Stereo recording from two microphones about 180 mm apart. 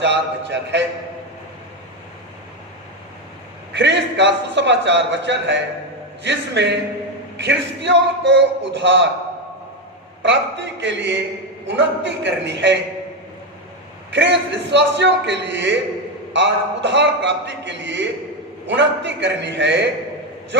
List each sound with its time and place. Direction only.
0.0 s a man's voice: 75° right (ahead or behind)
3.7 s a man's voice: 75° right (ahead or behind)
10.2 s a man's voice: 75° right (ahead or behind)
14.1 s a man's voice: 75° right (ahead or behind)